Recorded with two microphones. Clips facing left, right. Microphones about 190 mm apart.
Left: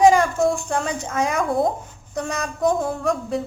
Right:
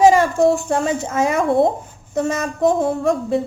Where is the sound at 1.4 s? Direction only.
25° right (ahead or behind).